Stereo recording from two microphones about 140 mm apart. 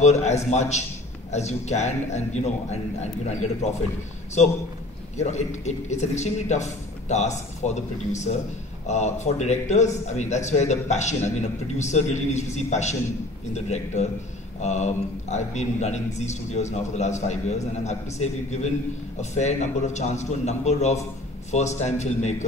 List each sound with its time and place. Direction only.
0.0 s a man's voice: 55° left (ahead or behind)
5.1 s a man's voice: 55° left (ahead or behind)